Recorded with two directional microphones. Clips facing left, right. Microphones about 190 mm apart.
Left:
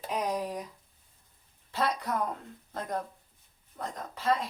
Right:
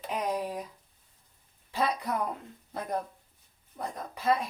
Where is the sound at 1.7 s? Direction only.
15° right (ahead or behind).